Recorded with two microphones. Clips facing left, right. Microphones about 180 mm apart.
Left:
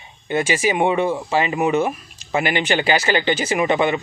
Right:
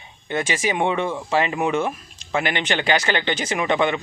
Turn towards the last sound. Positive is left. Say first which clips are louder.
# left 3 dB
turn(degrees=5)  # may be behind; listen again after turning